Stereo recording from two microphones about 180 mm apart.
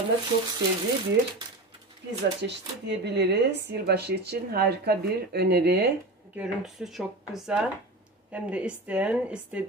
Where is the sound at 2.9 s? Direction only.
75° right (ahead or behind).